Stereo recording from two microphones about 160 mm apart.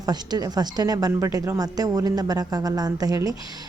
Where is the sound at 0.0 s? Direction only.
25° right (ahead or behind).